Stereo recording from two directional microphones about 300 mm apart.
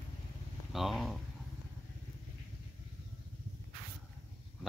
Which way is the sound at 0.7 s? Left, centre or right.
Centre.